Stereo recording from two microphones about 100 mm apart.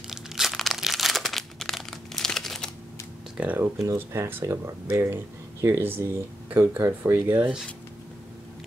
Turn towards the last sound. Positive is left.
turn(degrees=-20)  # may be behind; listen again after turning